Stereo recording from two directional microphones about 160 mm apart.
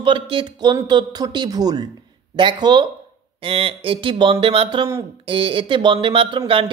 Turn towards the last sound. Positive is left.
turn(degrees=-35)  # may be behind; listen again after turning